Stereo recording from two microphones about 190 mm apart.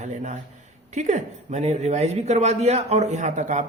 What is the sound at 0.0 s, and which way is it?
Speech, 40° right (ahead or behind).